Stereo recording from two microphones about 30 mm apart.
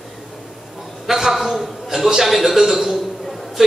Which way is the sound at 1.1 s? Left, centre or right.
Centre.